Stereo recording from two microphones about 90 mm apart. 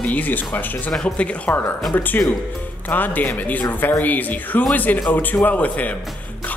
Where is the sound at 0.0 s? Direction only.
20° left (ahead or behind).